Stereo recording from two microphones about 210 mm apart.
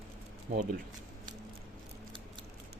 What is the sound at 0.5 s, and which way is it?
Speech, 40° right (ahead or behind).